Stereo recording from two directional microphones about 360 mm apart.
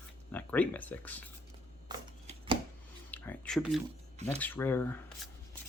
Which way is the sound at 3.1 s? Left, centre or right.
Centre.